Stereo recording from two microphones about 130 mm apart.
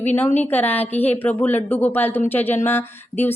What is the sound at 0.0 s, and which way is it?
Speech, 15° left (ahead or behind).